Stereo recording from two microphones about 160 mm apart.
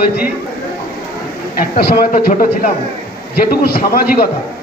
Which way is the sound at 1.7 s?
60° left (ahead or behind).